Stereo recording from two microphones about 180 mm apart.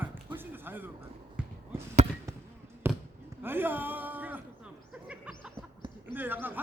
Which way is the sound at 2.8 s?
15° right (ahead or behind).